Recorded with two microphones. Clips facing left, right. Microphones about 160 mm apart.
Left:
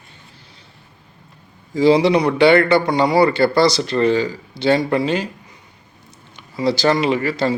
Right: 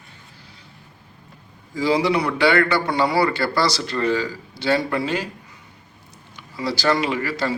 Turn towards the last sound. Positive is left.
turn(degrees=25)  # may be behind; listen again after turning